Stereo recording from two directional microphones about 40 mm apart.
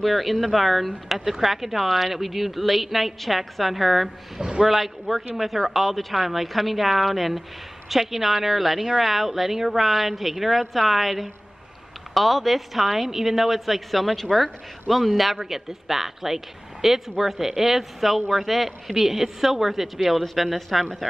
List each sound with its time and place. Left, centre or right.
0.0 s a woman's voice: centre
4.4 s speech: centre
4.6 s a woman's voice: centre